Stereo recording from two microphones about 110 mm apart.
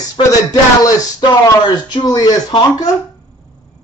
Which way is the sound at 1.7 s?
45° left (ahead or behind).